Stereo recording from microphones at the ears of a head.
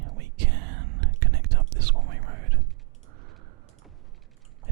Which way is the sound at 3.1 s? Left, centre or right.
Right.